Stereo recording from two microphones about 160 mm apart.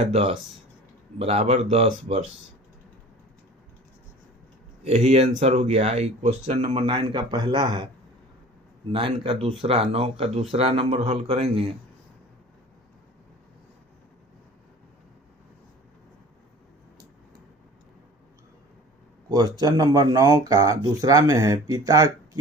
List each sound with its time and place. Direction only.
0.0 s speech: 40° right (ahead or behind)
4.8 s speech: 45° right (ahead or behind)
8.9 s speech: 30° right (ahead or behind)
19.3 s speech: 25° right (ahead or behind)